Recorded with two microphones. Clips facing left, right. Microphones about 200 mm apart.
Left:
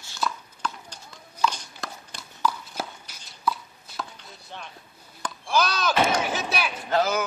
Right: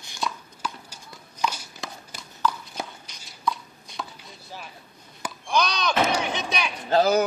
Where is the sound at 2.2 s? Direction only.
5° left (ahead or behind).